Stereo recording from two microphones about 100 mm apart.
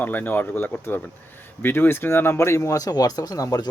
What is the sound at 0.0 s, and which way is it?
Speech, 20° left (ahead or behind).